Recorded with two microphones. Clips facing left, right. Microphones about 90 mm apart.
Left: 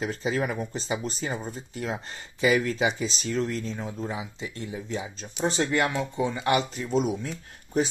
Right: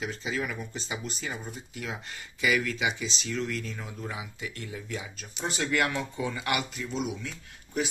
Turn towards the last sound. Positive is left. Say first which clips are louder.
# left 6 dB
turn(degrees=40)  # may be behind; listen again after turning